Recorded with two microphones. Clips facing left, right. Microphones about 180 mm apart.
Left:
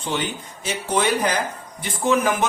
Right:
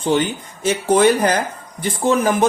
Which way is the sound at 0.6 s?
45° right (ahead or behind).